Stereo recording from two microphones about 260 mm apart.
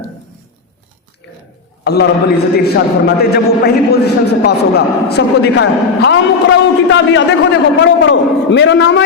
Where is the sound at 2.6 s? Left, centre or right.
Left.